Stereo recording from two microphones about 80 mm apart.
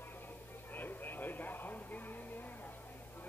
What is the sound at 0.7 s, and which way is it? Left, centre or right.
Radio, left.